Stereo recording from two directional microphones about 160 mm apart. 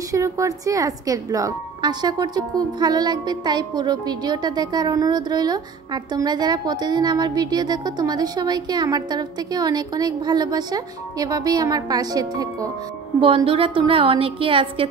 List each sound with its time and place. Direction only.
0.1 s speech: 20° right (ahead or behind)
13.2 s a woman's voice: 35° right (ahead or behind)